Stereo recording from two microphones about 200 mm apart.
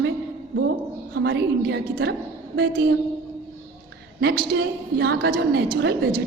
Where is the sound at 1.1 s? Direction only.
60° right (ahead or behind).